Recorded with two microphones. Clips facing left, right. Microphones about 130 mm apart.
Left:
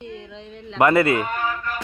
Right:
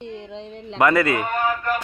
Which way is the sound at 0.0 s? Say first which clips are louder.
Right 3 dB; 30° right (ahead or behind).